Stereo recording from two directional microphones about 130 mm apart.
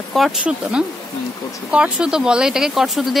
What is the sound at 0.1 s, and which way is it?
Speech, 5° right (ahead or behind).